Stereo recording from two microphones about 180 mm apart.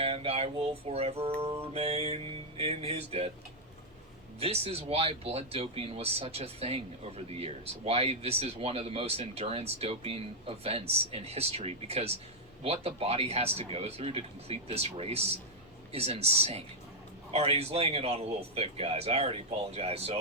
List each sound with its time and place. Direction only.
0.0 s speech: 30° right (ahead or behind)
4.4 s speech: 35° right (ahead or behind)